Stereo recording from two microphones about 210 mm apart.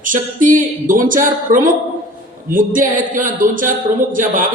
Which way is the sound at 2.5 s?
40° right (ahead or behind).